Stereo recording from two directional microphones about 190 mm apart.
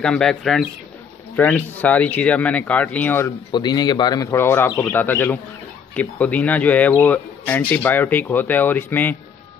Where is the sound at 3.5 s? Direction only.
20° left (ahead or behind).